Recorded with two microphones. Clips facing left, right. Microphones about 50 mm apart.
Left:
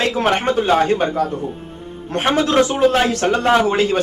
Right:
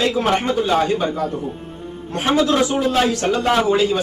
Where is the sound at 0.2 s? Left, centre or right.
Left.